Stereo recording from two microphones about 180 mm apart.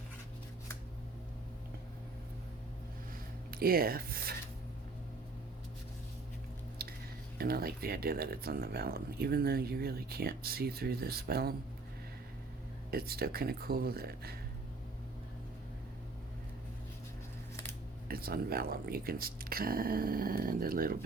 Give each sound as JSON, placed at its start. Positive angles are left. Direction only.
{"t": 3.5, "sound": "speech", "side_deg": -55}
{"t": 6.8, "sound": "squish", "side_deg": -60}
{"t": 7.3, "sound": "speech", "side_deg": -55}
{"t": 12.9, "sound": "speech", "side_deg": -55}
{"t": 18.1, "sound": "speech", "side_deg": -55}